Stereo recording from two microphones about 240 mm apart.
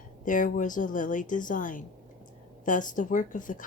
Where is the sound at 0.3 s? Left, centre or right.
Left.